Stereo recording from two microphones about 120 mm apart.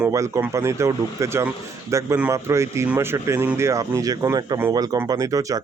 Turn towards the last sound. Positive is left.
turn(degrees=-25)  # may be behind; listen again after turning